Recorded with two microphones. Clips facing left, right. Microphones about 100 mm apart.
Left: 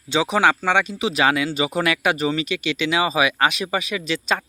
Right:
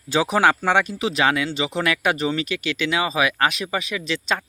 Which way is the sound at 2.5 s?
20° left (ahead or behind).